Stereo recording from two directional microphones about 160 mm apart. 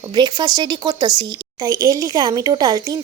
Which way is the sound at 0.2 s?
25° right (ahead or behind).